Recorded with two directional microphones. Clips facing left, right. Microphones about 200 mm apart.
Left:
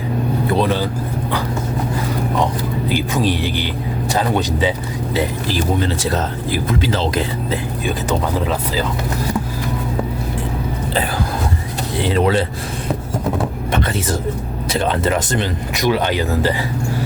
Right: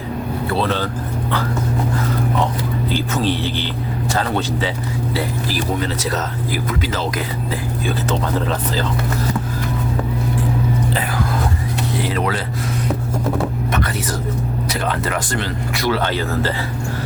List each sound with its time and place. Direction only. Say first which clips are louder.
0.5 s speech: left 2 dB; 15° left (ahead or behind)
2.9 s a man's voice: left 2 dB; 15° left (ahead or behind)
8.4 s a man's voice: left 1 dB; 10° left (ahead or behind)
11.9 s speech: left 7 dB; 25° left (ahead or behind)
13.7 s a sound: left 5 dB; 25° left (ahead or behind)
14.7 s speech: left 6 dB; 25° left (ahead or behind)